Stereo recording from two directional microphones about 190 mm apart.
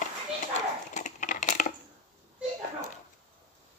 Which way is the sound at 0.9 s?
40° left (ahead or behind).